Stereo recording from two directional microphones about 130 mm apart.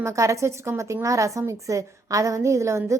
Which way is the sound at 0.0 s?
25° right (ahead or behind).